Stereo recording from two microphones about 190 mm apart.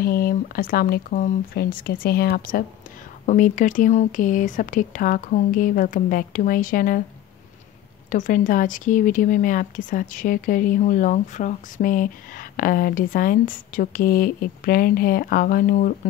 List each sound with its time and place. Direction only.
0.0 s speech: 50° left (ahead or behind)
8.1 s speech: 45° left (ahead or behind)